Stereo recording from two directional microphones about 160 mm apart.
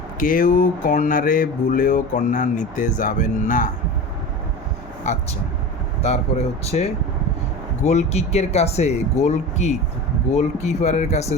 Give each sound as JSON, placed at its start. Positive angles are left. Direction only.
{"t": 0.2, "sound": "a sound", "side_deg": 60}
{"t": 5.1, "sound": "speech", "side_deg": 50}
{"t": 6.7, "sound": "speech", "side_deg": 40}